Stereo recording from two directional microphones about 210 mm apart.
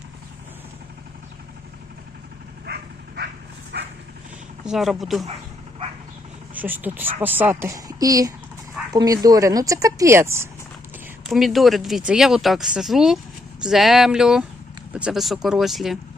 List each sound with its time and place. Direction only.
3.7 s dog: 55° right (ahead or behind)
4.6 s speech: centre (ahead or behind)
6.5 s speech: 10° right (ahead or behind)
11.3 s speech: centre (ahead or behind)